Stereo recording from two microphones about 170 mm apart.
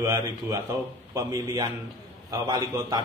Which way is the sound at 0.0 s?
20° right (ahead or behind).